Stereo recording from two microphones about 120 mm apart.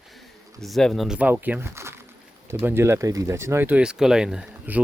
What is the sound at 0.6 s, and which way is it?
Speech, centre (ahead or behind).